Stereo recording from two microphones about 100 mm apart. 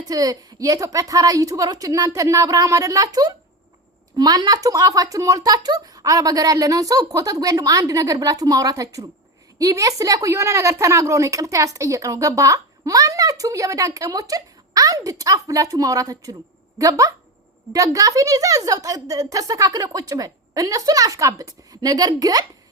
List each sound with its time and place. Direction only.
0.1 s a woman's voice: 40° right (ahead or behind)